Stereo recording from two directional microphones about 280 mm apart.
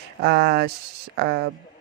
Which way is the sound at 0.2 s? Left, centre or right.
Right.